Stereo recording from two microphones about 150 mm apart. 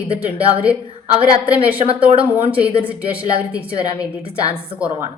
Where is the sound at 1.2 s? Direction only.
40° right (ahead or behind).